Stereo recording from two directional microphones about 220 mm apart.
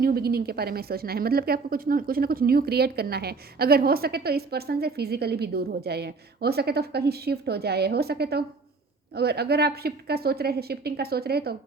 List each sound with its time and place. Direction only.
0.0 s a woman's voice: 45° right (ahead or behind)